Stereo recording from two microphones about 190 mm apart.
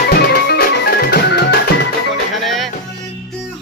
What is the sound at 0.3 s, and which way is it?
Music, 55° left (ahead or behind).